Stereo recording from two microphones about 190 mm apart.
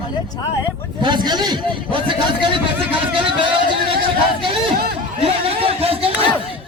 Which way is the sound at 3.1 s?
25° right (ahead or behind).